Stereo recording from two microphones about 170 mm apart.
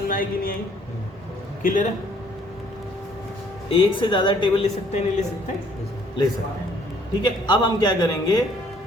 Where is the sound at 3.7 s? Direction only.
30° left (ahead or behind).